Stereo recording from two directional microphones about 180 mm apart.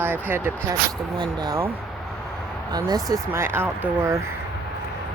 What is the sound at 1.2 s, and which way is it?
Speech, 20° right (ahead or behind).